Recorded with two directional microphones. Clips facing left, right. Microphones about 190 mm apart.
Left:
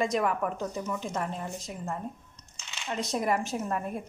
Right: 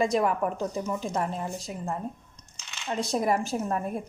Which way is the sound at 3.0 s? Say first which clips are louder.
Right 2 dB; 30° right (ahead or behind).